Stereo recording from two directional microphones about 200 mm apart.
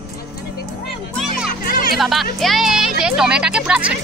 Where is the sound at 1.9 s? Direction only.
Centre (ahead or behind).